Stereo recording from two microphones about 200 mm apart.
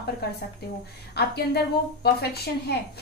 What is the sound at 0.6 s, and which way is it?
Speech, 50° left (ahead or behind).